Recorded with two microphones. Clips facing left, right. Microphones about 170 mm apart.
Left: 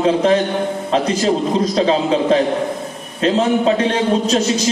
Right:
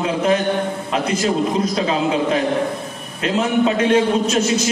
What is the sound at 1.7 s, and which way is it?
A man's voice, 30° left (ahead or behind).